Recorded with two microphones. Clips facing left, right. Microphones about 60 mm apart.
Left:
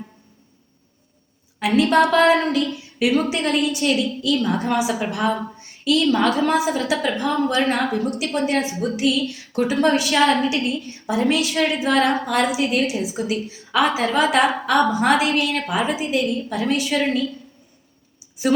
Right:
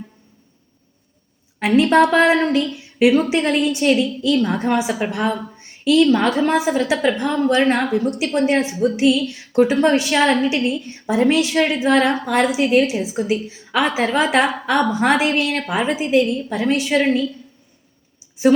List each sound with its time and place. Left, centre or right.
1.5 s a woman's voice: right
2.7 s a sound: right
3.2 s a woman's voice: right